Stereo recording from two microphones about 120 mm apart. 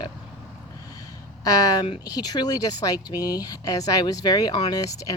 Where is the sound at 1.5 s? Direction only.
30° left (ahead or behind).